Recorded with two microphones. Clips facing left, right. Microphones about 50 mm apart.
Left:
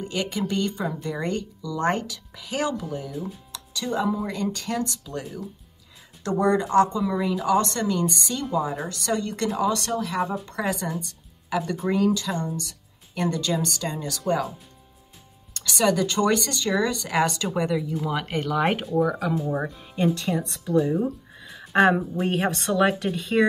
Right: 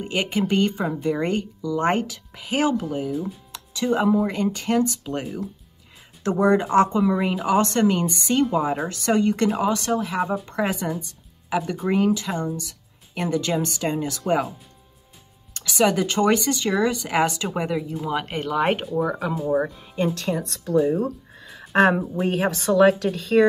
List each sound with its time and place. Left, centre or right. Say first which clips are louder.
0.0 s speech: right 4 dB; right
3.1 s a woman's voice: right 5 dB; centre
3.5 s music: right 5 dB; right
4.3 s speech: right 5 dB; right
6.5 s speech: right 1 dB; right
11.0 s speech: left 1 dB; right
11.9 s speech: right 2 dB; right
15.5 s a woman's voice: right 2 dB; centre